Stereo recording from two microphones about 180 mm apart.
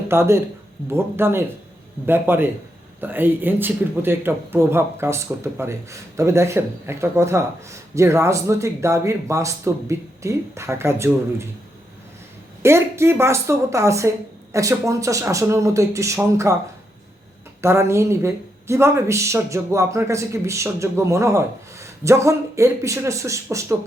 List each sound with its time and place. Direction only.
0.1 s speech: 15° right (ahead or behind)
12.6 s speech: 15° right (ahead or behind)
17.6 s speech: 15° right (ahead or behind)